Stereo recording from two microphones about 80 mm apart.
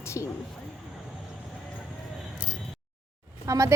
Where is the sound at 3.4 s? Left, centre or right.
Right.